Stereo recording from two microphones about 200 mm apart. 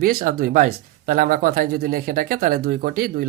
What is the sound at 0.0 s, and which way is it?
Speech, 45° right (ahead or behind).